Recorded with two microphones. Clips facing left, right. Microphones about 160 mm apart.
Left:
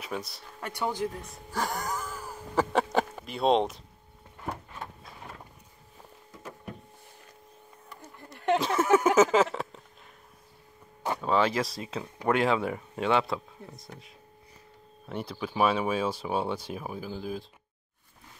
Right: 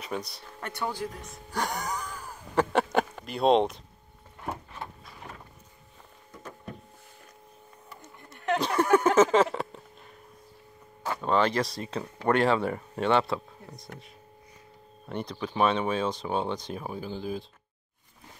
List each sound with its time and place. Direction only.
0.0 s speech: centre (ahead or behind)
0.7 s speech: 15° left (ahead or behind)
1.5 s speech: centre (ahead or behind)
8.5 s speech: 5° left (ahead or behind)
11.1 s speech: 5° left (ahead or behind)
15.0 s speech: 5° left (ahead or behind)